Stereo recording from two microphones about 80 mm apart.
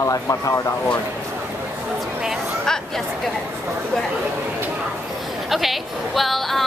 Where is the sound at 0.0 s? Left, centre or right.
Left.